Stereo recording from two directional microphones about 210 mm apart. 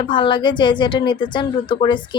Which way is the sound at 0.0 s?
25° left (ahead or behind).